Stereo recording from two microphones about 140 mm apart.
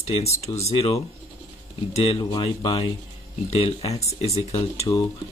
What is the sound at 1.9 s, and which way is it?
Speech, 45° left (ahead or behind).